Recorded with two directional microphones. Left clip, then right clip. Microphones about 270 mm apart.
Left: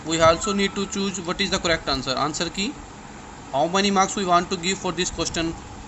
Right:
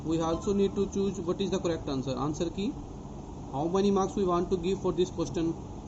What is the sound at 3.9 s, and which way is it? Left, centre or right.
A man's voice, left.